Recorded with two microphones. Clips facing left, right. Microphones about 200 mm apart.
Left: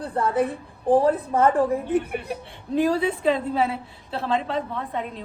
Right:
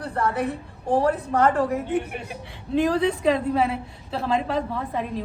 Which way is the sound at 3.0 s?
Centre (ahead or behind).